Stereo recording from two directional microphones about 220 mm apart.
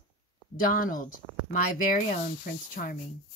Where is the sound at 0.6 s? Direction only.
40° left (ahead or behind).